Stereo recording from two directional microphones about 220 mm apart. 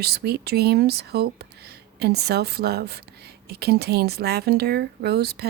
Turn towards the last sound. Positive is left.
turn(degrees=-45)  # may be behind; listen again after turning